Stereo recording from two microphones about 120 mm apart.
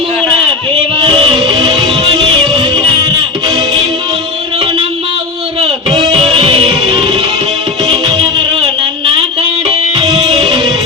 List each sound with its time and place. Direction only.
0.7 s music: 40° right (ahead or behind)
5.9 s music: 45° right (ahead or behind)
10.4 s music: 40° right (ahead or behind)